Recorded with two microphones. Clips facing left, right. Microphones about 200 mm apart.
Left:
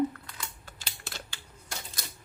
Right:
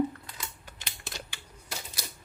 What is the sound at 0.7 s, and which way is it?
Typing, 20° right (ahead or behind).